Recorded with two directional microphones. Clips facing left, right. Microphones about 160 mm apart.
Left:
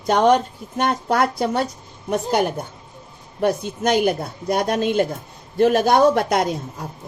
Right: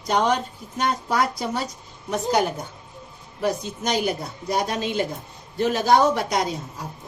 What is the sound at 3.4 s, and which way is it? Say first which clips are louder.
Speech: left 5 dB; 55° left (ahead or behind).